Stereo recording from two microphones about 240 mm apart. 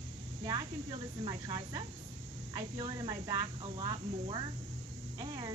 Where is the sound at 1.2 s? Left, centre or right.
Centre.